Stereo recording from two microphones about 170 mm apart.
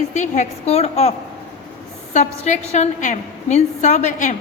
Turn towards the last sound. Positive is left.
turn(degrees=45)  # may be behind; listen again after turning